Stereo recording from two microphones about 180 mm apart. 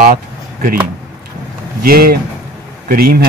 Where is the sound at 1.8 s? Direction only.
55° right (ahead or behind).